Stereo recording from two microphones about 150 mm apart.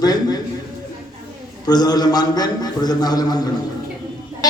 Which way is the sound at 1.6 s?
25° left (ahead or behind).